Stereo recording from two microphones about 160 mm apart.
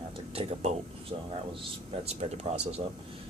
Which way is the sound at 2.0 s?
40° right (ahead or behind).